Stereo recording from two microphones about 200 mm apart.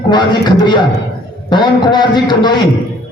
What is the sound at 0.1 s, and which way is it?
A man's voice, 20° left (ahead or behind).